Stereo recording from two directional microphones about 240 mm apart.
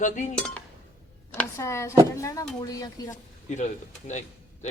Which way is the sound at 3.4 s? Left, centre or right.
Left.